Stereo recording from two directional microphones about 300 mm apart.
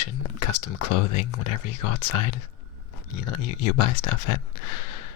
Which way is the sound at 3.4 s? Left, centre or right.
Left.